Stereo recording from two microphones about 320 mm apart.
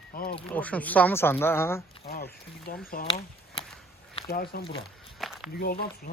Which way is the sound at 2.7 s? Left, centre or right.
Left.